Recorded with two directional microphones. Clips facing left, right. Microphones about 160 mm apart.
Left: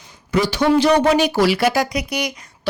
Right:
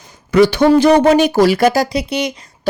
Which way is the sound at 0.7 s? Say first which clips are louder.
Even; 50° right (ahead or behind).